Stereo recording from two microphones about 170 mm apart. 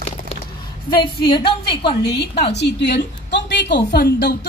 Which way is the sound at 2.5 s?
90° left.